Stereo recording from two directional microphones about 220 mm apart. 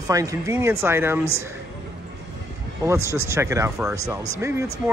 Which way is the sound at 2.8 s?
15° right (ahead or behind).